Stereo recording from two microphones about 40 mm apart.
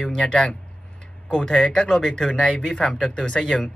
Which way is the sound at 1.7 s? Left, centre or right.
Centre.